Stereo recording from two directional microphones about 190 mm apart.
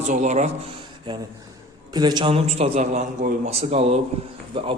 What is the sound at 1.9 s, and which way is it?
A man's voice, 20° right (ahead or behind).